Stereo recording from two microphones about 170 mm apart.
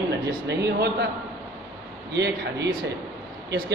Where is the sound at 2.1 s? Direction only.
85° right.